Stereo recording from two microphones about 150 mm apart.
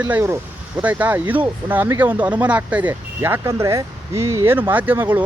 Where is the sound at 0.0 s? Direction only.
20° right (ahead or behind).